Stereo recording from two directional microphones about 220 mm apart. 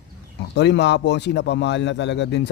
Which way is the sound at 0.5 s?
50° left (ahead or behind).